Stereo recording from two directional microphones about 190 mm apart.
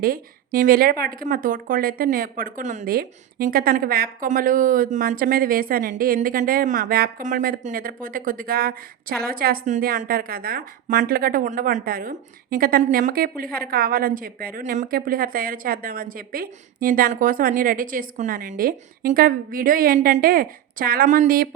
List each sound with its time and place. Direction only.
0.0 s speech: 50° right (ahead or behind)